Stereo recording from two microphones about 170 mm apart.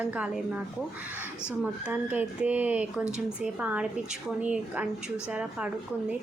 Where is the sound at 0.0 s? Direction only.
10° right (ahead or behind).